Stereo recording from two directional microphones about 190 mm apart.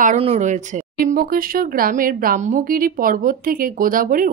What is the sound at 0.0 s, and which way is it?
Speech, 35° right (ahead or behind).